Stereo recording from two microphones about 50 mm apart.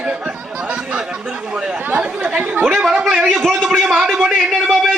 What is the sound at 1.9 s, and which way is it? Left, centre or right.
Chatter, right.